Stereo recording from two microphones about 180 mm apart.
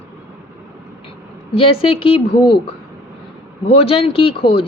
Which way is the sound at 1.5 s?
30° left (ahead or behind).